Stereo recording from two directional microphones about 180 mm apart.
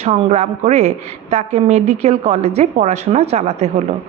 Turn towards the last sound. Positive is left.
turn(degrees=-35)  # may be behind; listen again after turning